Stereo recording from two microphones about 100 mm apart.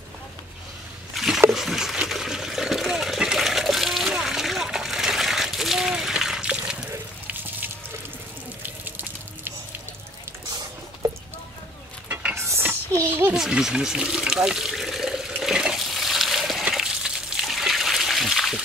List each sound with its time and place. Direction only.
1.1 s a sound: 5° right (ahead or behind)
1.5 s water: 5° right (ahead or behind)
8.6 s water: 20° right (ahead or behind)
11.0 s clip-clop: 40° right (ahead or behind)
12.4 s a sound: 25° right (ahead or behind)
13.3 s water: 5° right (ahead or behind)